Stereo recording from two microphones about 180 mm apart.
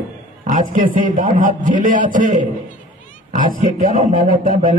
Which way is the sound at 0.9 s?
50° right (ahead or behind).